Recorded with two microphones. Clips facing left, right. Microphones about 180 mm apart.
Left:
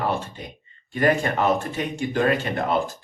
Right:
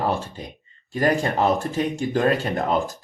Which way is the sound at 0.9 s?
35° right (ahead or behind).